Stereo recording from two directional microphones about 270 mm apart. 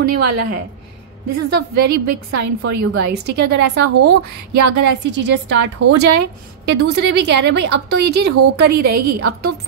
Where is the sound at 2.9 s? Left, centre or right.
Right.